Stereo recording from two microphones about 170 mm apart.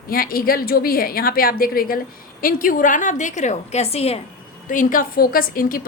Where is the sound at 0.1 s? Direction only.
60° left (ahead or behind); by 4.2 s 35° left (ahead or behind).